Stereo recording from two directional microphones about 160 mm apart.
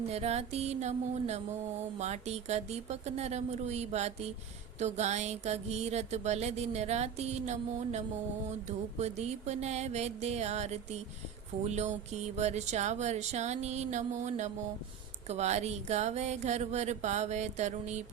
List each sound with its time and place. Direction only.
0.1 s music: 40° right (ahead or behind)